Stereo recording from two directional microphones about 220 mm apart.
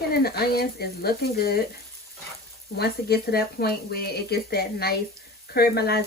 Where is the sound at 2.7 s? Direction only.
45° left (ahead or behind).